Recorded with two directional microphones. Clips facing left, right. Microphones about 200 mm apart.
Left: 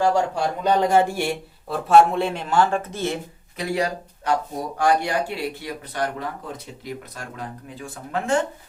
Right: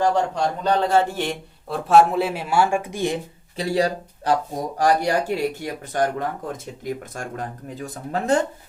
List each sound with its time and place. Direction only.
0.0 s speech: 10° left (ahead or behind); by 3.2 s 15° right (ahead or behind)
3.6 s speech: 30° right (ahead or behind)